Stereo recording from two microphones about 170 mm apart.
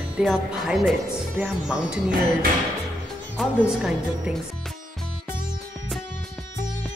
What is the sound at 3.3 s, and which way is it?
A woman's voice, 5° right (ahead or behind).